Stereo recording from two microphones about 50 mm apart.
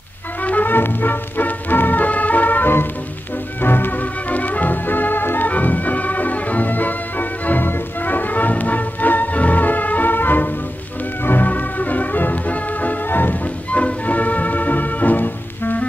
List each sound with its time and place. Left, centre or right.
0.4 s music: left
4.3 s music: left